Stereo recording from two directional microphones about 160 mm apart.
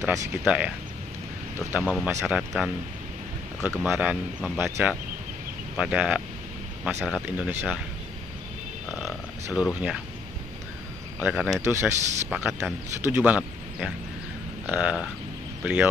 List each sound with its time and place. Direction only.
0.0 s speech: 10° right (ahead or behind)
1.7 s speech: 10° right (ahead or behind)
3.7 s speech: centre (ahead or behind)
7.0 s speech: 5° left (ahead or behind)
7.3 s speech: 5° right (ahead or behind)
8.9 s speech: centre (ahead or behind)
11.1 s speech: 10° right (ahead or behind)